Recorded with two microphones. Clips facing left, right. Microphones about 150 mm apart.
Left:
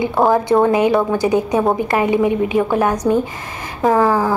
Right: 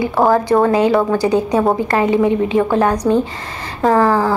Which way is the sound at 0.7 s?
15° left (ahead or behind).